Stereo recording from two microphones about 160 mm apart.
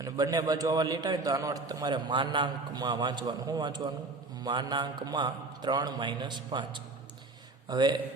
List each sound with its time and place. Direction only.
0.0 s a man's voice: 25° right (ahead or behind)